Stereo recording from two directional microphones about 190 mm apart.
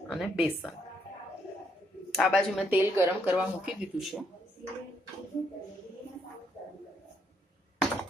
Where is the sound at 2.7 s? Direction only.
10° right (ahead or behind).